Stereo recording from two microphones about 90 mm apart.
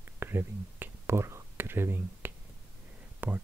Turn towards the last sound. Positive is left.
turn(degrees=-25)  # may be behind; listen again after turning